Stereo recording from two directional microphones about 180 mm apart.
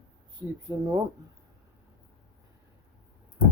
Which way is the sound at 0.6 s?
20° right (ahead or behind).